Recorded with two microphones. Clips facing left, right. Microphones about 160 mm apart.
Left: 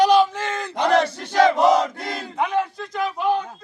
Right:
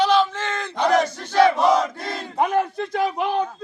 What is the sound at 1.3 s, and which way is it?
Battle cry, 15° left (ahead or behind).